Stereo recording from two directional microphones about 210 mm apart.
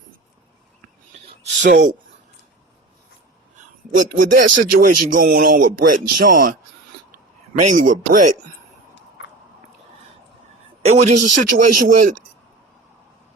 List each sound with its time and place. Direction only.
1.3 s speech: 45° right (ahead or behind)
3.9 s speech: 40° right (ahead or behind)
7.6 s speech: 35° right (ahead or behind)
9.0 s a sound: 60° left (ahead or behind)
10.8 s speech: 30° right (ahead or behind)